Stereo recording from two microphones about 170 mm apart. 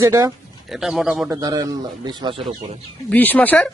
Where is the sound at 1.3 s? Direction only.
20° right (ahead or behind).